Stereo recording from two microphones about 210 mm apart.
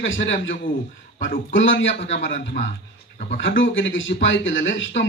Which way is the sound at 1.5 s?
65° left (ahead or behind).